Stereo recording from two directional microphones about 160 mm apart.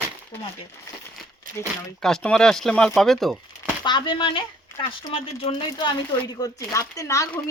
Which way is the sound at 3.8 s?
30° left (ahead or behind).